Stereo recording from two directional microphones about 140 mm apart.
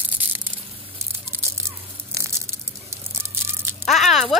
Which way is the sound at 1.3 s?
15° right (ahead or behind).